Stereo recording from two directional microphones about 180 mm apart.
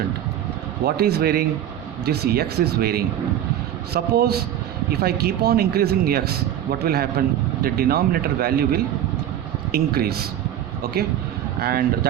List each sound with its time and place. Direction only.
0.9 s speech: 60° right (ahead or behind)
11.6 s speech: 55° right (ahead or behind)